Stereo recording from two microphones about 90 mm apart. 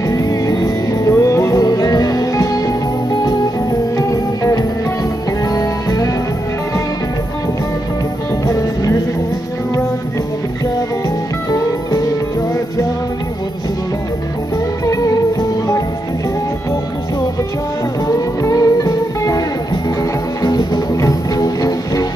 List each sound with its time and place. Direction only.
0.1 s music: 40° left (ahead or behind)
4.1 s music: 40° left (ahead or behind)
18.0 s music: 40° left (ahead or behind)